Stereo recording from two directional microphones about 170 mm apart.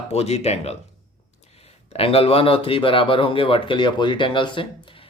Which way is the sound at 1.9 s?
35° left (ahead or behind).